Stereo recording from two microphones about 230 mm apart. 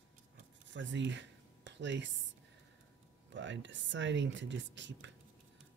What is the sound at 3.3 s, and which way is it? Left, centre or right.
Speech, right.